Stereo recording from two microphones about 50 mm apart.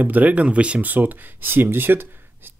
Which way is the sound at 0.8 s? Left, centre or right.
Right.